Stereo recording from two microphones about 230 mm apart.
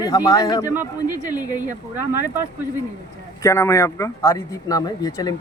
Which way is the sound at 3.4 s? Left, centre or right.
Centre.